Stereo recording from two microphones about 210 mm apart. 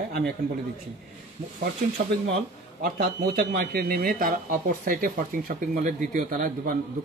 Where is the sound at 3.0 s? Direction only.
45° right (ahead or behind).